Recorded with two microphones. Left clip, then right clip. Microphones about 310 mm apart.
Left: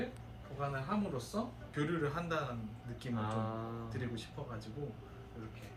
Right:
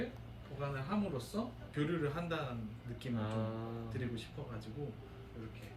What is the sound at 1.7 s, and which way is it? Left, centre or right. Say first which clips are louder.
A man's voice: left 1 dB; centre.